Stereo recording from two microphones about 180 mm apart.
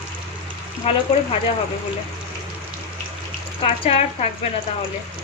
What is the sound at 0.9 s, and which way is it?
Speech, 30° left (ahead or behind).